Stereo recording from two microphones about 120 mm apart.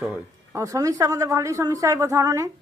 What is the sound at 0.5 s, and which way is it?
A woman's voice, 30° right (ahead or behind).